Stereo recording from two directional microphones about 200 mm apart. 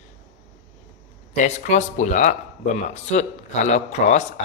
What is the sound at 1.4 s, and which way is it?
Speech, 35° left (ahead or behind).